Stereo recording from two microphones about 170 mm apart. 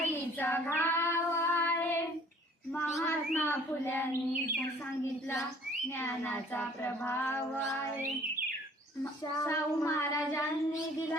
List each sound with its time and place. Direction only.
0.3 s child singing: 10° left (ahead or behind)
6.0 s child singing: 15° left (ahead or behind)
9.4 s child singing: 20° left (ahead or behind)